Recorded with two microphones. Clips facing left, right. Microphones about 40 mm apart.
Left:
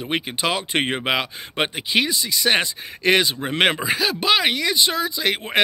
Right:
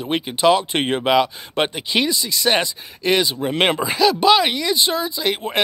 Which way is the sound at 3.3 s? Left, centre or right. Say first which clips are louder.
Right 1 dB; centre.